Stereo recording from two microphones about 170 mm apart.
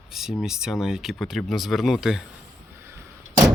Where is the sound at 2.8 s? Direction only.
15° right (ahead or behind).